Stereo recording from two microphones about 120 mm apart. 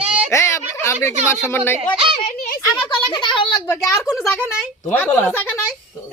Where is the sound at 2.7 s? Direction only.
40° left (ahead or behind).